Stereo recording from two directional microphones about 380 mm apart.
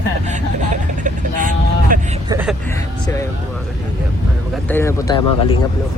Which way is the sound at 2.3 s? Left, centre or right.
Centre.